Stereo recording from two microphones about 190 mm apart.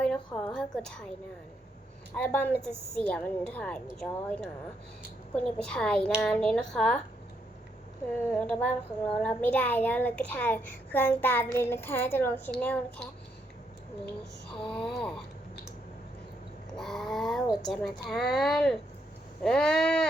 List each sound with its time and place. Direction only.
0.3 s a sound: 20° left (ahead or behind)
0.5 s a woman's voice: 5° left (ahead or behind)
2.1 s child singing: 10° left (ahead or behind)
5.3 s a woman's voice: 5° left (ahead or behind)
8.3 s child singing: 10° left (ahead or behind)
14.5 s a woman's voice: 5° left (ahead or behind)
16.7 s cat: centre (ahead or behind)
17.7 s a woman's voice: centre (ahead or behind)